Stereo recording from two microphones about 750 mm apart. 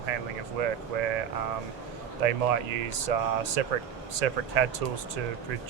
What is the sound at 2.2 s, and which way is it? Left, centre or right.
Speech, right.